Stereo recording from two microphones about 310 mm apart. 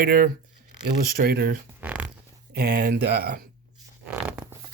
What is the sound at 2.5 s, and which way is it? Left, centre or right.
Speech, right.